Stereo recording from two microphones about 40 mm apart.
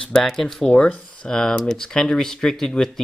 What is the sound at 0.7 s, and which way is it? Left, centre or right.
Speech, left.